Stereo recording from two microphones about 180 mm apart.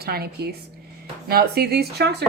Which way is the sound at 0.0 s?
60° right (ahead or behind).